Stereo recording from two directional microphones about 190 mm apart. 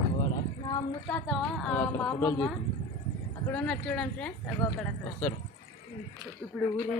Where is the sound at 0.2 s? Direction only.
20° left (ahead or behind).